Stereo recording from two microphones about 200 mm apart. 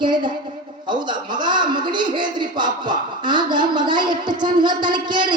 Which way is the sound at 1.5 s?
25° right (ahead or behind).